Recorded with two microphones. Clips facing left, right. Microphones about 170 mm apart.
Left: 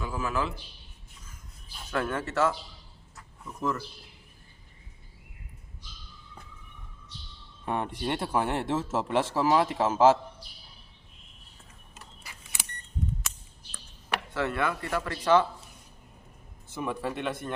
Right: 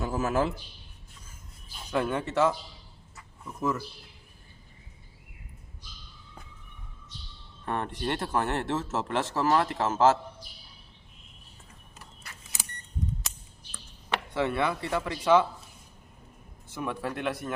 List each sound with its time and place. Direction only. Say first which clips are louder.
0.0 s a man's voice: right 4 dB; 45° right (ahead or behind)
1.9 s speech: right 2 dB; 15° right (ahead or behind)
3.2 s a sound: right 1 dB; 5° right (ahead or behind)
7.6 s speech: left 1 dB; 10° left (ahead or behind)
14.1 s speech: right 2 dB; 20° right (ahead or behind)
16.7 s speech: left 1 dB; centre (ahead or behind)